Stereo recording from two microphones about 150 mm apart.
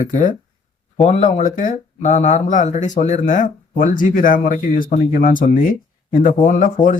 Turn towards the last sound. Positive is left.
turn(degrees=60)  # may be behind; listen again after turning